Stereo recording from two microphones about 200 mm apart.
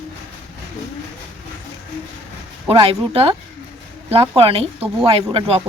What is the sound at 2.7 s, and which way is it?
Speech, 30° right (ahead or behind).